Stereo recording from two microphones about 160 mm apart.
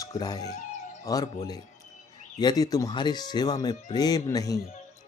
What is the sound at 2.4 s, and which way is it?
Speech, 25° left (ahead or behind).